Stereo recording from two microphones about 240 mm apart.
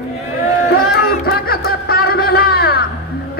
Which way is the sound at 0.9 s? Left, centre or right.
Left.